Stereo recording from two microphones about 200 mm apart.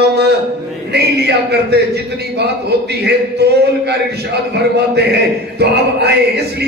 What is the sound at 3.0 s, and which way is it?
A man's voice, 55° right (ahead or behind).